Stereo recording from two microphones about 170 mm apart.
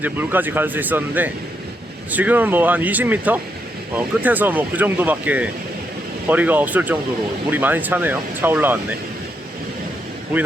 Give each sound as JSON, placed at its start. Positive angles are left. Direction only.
{"t": 0.0, "sound": "speech", "side_deg": -10}